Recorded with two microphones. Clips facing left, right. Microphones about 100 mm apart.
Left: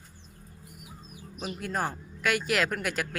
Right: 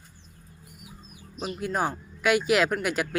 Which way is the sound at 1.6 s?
5° right (ahead or behind).